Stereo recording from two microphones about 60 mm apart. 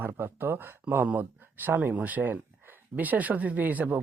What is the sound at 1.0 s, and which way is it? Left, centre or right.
Speech, right.